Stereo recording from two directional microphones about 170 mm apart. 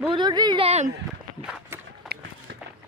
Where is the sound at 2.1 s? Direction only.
70° right (ahead or behind).